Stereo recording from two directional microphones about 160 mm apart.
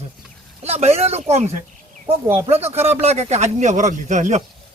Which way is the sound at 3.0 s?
40° right (ahead or behind).